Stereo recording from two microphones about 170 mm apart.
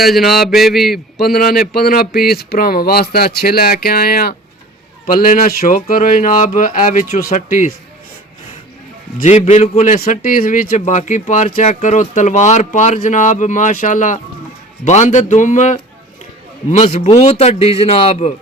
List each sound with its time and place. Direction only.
0.0 s mantra: centre (ahead or behind)
1.2 s a man's voice: 65° left (ahead or behind); by 7.8 s 50° left (ahead or behind)
9.1 s a man's voice: 45° left (ahead or behind)